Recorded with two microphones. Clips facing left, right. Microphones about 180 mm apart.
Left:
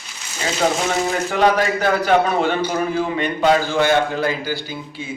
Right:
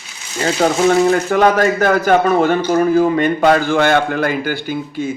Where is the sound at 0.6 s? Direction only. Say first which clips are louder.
Right 7 dB; 45° right (ahead or behind).